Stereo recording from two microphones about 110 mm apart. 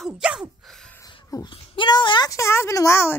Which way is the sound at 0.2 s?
10° right (ahead or behind).